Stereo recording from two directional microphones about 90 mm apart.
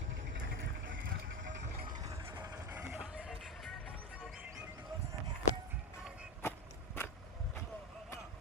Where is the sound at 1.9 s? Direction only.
40° right (ahead or behind).